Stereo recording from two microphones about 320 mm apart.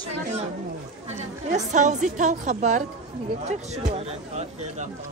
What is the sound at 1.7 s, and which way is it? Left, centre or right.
A woman's voice, right.